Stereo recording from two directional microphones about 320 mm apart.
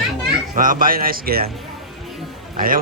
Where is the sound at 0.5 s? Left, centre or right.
Right.